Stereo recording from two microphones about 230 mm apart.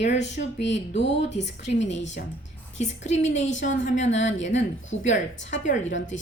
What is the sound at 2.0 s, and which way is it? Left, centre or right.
Speech, left.